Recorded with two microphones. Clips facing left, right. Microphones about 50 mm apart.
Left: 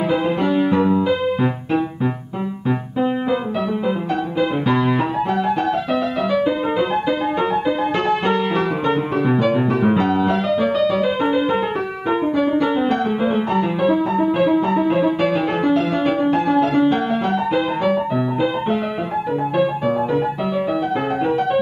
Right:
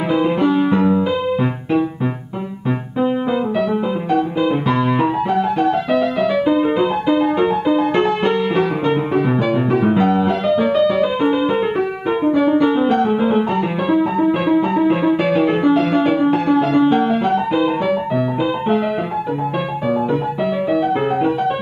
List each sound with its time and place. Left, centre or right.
0.5 s music: centre
4.1 s music: centre
20.7 s music: centre